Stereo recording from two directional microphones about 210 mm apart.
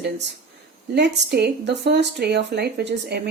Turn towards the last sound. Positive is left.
turn(degrees=-50)  # may be behind; listen again after turning